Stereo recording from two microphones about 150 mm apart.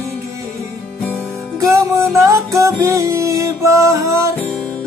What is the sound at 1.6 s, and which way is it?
Music, 20° right (ahead or behind).